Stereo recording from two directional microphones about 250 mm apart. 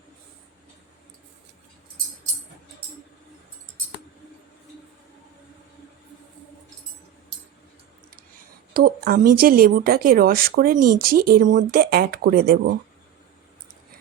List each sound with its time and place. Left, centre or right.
8.7 s speech: right